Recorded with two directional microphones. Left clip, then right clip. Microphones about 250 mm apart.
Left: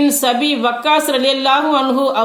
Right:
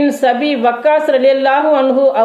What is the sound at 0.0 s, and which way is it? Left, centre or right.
Speech, left.